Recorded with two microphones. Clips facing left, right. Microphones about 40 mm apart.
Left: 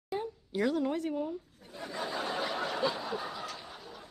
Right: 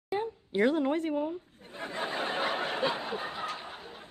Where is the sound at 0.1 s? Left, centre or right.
Right.